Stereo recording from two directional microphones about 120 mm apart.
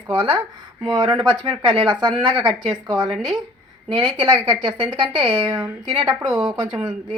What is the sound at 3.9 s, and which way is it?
A woman's voice, 40° right (ahead or behind).